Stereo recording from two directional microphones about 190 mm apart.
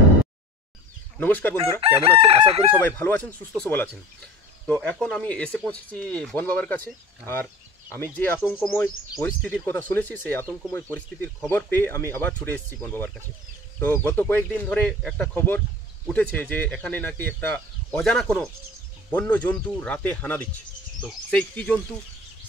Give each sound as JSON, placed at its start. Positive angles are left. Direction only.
{"t": 1.1, "sound": "speech", "side_deg": 10}
{"t": 2.0, "sound": "chicken", "side_deg": -30}
{"t": 2.8, "sound": "speech", "side_deg": 10}